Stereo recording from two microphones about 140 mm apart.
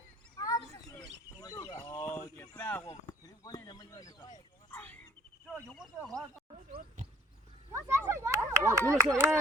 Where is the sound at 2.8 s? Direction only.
30° left (ahead or behind).